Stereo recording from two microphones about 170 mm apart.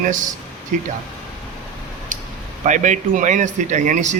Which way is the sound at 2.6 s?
45° right (ahead or behind).